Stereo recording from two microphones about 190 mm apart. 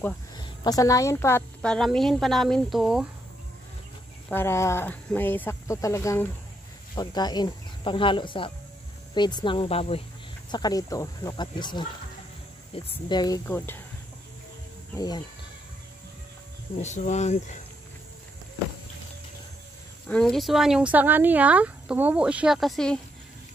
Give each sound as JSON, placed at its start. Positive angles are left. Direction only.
{"t": 0.4, "sound": "speech", "side_deg": 20}
{"t": 4.3, "sound": "speech", "side_deg": 10}
{"t": 10.5, "sound": "speech", "side_deg": 20}
{"t": 13.5, "sound": "speech", "side_deg": 10}
{"t": 15.0, "sound": "speech", "side_deg": 20}
{"t": 16.7, "sound": "speech", "side_deg": 35}
{"t": 20.1, "sound": "speech", "side_deg": 5}